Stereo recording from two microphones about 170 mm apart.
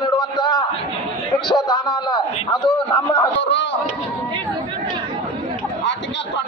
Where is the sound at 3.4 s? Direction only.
90° left.